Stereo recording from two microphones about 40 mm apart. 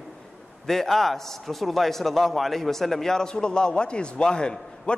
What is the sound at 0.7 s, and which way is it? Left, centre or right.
A man's voice, centre.